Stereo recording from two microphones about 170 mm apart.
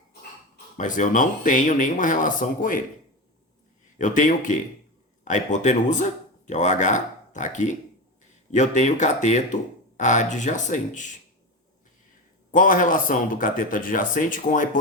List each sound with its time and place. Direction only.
0.8 s speech: 50° left (ahead or behind)
3.9 s speech: 50° left (ahead or behind)
12.5 s speech: 50° left (ahead or behind)